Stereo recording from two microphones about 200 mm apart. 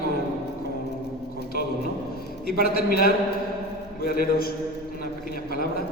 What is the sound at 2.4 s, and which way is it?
A man's voice, 50° left (ahead or behind).